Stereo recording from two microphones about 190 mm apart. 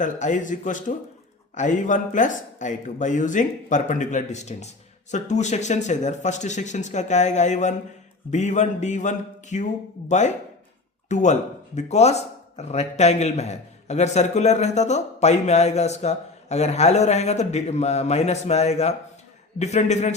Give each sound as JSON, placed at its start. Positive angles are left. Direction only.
{"t": 0.0, "sound": "speech", "side_deg": 40}